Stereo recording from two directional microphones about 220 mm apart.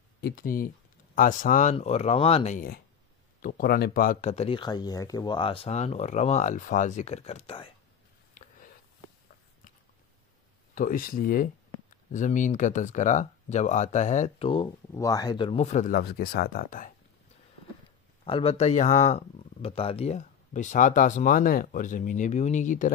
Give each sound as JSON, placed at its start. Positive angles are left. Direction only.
{"t": 0.2, "sound": "speech", "side_deg": 40}
{"t": 8.4, "sound": "a sound", "side_deg": 40}
{"t": 10.7, "sound": "speech", "side_deg": 40}
{"t": 18.2, "sound": "speech", "side_deg": 25}